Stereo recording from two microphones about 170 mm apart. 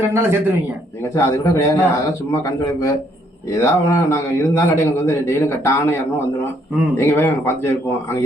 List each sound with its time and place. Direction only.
0.0 s a man's voice: 15° right (ahead or behind)
1.1 s a man's voice: 15° left (ahead or behind)